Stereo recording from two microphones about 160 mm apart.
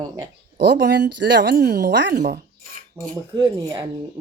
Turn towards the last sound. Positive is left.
turn(degrees=-20)  # may be behind; listen again after turning